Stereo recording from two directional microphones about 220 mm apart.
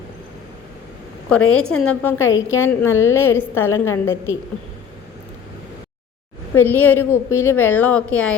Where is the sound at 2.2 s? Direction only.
65° left (ahead or behind).